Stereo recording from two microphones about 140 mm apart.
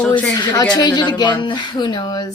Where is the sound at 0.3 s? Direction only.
30° left (ahead or behind).